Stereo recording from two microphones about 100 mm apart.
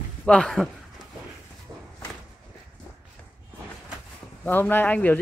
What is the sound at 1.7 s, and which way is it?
Walk, 30° right (ahead or behind).